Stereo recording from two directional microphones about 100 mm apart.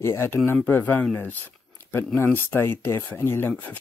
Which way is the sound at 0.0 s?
25° left (ahead or behind).